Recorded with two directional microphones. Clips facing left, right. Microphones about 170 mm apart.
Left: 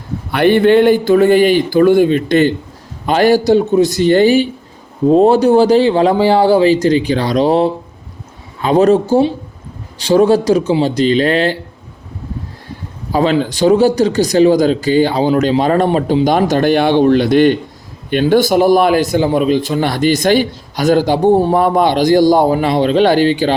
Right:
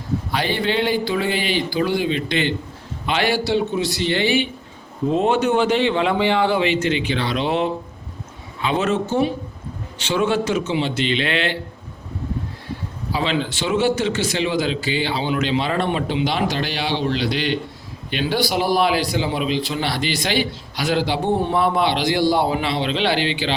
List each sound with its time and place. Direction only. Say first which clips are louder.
0.3 s a man's voice: left 14 dB; 60° left (ahead or behind); by 11.5 s 40° left (ahead or behind)
13.1 s a man's voice: left 9 dB; 45° left (ahead or behind)